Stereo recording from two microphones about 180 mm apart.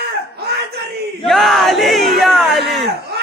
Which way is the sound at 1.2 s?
Centre (ahead or behind).